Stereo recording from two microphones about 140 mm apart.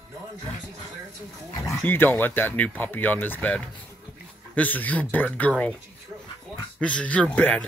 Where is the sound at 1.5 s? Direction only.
20° left (ahead or behind).